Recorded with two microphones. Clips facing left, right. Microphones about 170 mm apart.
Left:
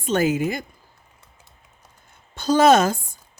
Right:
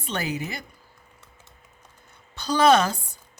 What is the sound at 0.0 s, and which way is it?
Speech, 45° left (ahead or behind).